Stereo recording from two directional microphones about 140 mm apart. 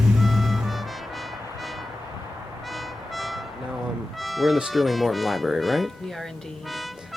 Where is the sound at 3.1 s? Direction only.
Centre (ahead or behind).